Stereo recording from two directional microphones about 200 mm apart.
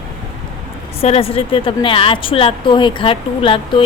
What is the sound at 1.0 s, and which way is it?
A woman's voice, 30° left (ahead or behind).